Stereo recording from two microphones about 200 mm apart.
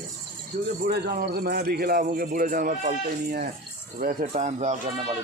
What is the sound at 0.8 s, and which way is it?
A man's voice, 50° right (ahead or behind).